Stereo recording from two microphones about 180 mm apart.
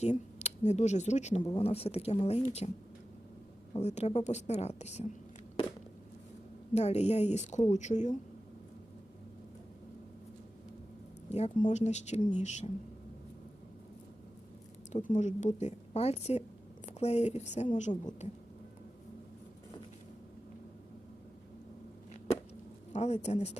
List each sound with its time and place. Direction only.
0.0 s a woman's voice: 40° left (ahead or behind)
3.8 s a woman's voice: 40° left (ahead or behind)
6.7 s a woman's voice: 35° left (ahead or behind)
11.3 s a woman's voice: 35° left (ahead or behind)
14.9 s a woman's voice: 45° left (ahead or behind)
22.9 s a woman's voice: 40° left (ahead or behind)